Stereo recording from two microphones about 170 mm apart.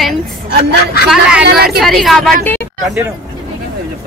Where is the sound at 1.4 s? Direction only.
65° right (ahead or behind).